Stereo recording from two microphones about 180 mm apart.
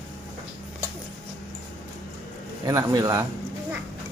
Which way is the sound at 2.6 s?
20° right (ahead or behind).